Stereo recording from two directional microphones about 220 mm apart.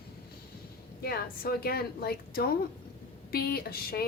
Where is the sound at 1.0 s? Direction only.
45° left (ahead or behind).